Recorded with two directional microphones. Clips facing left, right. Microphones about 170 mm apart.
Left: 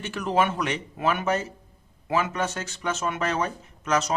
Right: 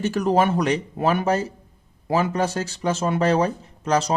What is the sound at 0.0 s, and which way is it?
Speech, 40° right (ahead or behind).